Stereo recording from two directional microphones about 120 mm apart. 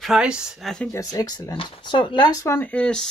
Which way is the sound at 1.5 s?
45° left (ahead or behind).